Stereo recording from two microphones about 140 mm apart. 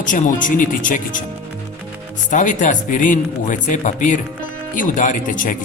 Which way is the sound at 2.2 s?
65° left (ahead or behind).